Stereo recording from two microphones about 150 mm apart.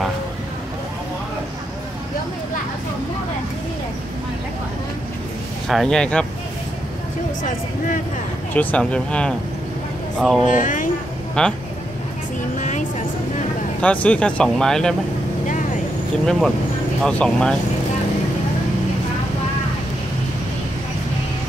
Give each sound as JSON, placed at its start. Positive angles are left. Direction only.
{"t": 5.7, "sound": "speech", "side_deg": 5}
{"t": 7.4, "sound": "speech", "side_deg": 60}
{"t": 8.5, "sound": "speech", "side_deg": 10}
{"t": 10.4, "sound": "speech", "side_deg": 60}
{"t": 11.4, "sound": "speech", "side_deg": 5}
{"t": 12.5, "sound": "music", "side_deg": 55}
{"t": 14.0, "sound": "speech", "side_deg": 10}
{"t": 16.3, "sound": "speech", "side_deg": 0}